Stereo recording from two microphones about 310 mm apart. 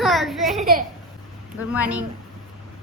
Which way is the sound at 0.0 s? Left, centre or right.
Centre.